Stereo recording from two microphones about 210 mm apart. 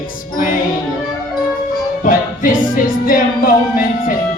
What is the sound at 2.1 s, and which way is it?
Music, 40° left (ahead or behind).